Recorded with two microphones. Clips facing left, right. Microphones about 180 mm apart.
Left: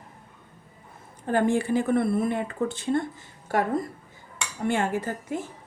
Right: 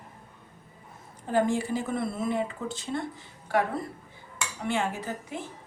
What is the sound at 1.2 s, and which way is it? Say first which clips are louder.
Speech: left 3 dB; 60° left (ahead or behind).